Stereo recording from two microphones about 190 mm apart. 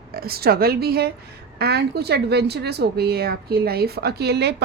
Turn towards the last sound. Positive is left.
turn(degrees=-60)  # may be behind; listen again after turning